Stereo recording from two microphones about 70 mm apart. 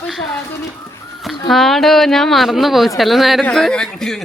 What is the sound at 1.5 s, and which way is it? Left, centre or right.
Speech, centre.